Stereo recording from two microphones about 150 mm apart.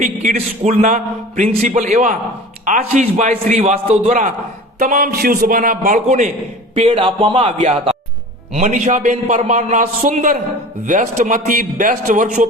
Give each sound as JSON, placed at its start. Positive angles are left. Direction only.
{"t": 0.0, "sound": "a man's voice", "side_deg": -55}
{"t": 4.8, "sound": "a man's voice", "side_deg": -70}
{"t": 6.7, "sound": "speech", "side_deg": -40}
{"t": 7.6, "sound": "a man's voice", "side_deg": -45}